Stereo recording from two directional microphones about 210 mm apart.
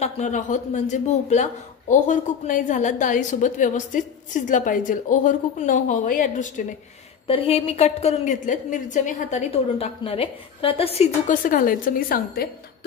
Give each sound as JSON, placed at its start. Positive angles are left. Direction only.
{"t": 0.0, "sound": "a man's voice", "side_deg": 35}
{"t": 7.2, "sound": "a man's voice", "side_deg": 25}